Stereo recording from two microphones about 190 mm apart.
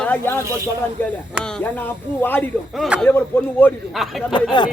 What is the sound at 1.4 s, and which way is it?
Speech, 5° left (ahead or behind).